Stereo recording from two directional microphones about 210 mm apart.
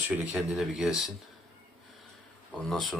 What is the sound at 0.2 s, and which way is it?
Speech, 5° right (ahead or behind).